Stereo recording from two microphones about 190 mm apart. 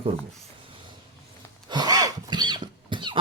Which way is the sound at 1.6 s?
20° right (ahead or behind).